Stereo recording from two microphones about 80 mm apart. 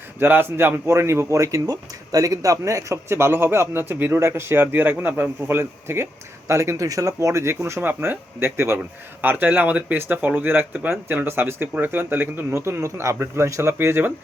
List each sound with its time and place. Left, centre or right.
0.2 s speech: right